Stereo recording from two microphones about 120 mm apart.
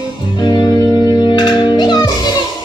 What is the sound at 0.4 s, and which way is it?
Music, 40° left (ahead or behind).